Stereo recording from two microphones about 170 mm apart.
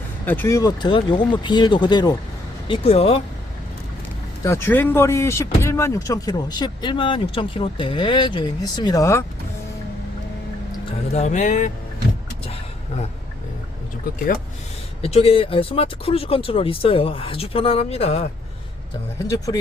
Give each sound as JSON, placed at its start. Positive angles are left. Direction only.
{"t": 0.3, "sound": "speech", "side_deg": 15}
{"t": 4.4, "sound": "speech", "side_deg": 15}
{"t": 11.1, "sound": "speech", "side_deg": 40}
{"t": 15.0, "sound": "speech", "side_deg": 35}